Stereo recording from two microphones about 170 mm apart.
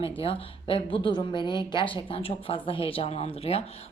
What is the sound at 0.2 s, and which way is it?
A woman's voice, 35° left (ahead or behind).